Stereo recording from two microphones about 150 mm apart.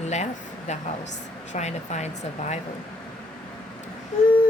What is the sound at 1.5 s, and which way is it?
Speech, 50° left (ahead or behind).